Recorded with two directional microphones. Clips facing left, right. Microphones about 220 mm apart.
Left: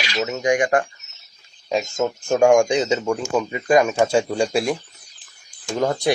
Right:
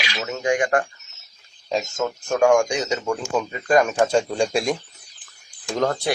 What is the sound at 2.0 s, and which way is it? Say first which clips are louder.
Speech: left 3 dB; 25° left (ahead or behind).